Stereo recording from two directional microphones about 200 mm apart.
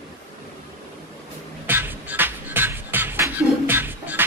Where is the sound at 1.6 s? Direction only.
10° right (ahead or behind).